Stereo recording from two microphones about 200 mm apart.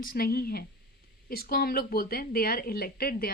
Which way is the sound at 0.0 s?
45° left (ahead or behind).